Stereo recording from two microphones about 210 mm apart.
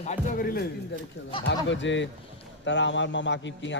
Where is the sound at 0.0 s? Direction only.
35° left (ahead or behind).